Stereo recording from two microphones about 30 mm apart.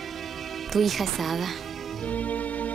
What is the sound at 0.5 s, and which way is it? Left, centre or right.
Speech, centre.